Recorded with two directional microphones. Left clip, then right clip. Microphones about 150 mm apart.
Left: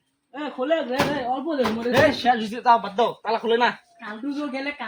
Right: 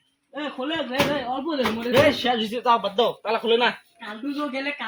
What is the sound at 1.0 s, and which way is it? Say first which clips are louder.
A man's voice: even; 5° right (ahead or behind).